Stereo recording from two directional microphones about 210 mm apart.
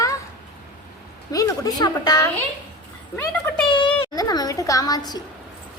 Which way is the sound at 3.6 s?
25° left (ahead or behind).